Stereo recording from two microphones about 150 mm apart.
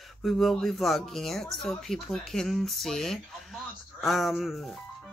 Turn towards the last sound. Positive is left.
turn(degrees=0)  # may be behind; listen again after turning